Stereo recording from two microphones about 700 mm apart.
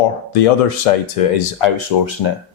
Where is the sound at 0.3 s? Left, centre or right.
Left.